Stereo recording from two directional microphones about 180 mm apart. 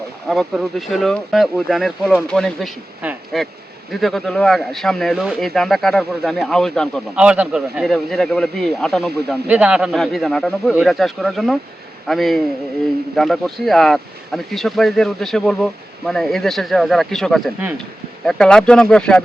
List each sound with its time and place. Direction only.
0.3 s speech: centre (ahead or behind)